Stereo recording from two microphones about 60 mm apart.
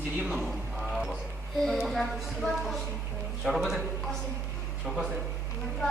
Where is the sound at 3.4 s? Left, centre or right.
Centre.